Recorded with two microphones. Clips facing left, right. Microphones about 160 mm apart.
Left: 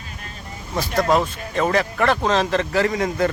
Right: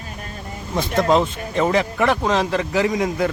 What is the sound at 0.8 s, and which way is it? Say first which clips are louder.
A man's voice: right 2 dB; 20° right (ahead or behind).